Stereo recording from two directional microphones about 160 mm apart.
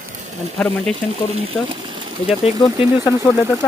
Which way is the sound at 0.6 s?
5° left (ahead or behind).